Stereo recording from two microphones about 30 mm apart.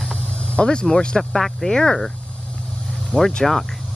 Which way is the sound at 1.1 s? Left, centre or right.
Centre.